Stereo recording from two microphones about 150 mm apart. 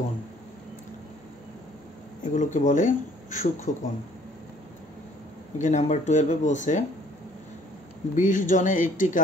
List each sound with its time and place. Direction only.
2.2 s speech: 55° left (ahead or behind)
5.6 s speech: 50° left (ahead or behind)
8.2 s speech: 60° left (ahead or behind)